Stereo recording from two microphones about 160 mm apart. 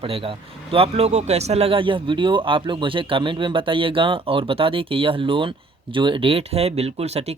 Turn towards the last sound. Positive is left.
turn(degrees=-40)  # may be behind; listen again after turning